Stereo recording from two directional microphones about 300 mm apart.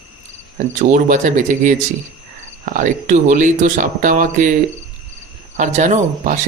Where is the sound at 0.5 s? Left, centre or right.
Right.